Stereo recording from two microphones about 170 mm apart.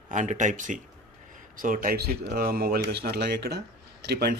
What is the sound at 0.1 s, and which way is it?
Speech, 45° right (ahead or behind).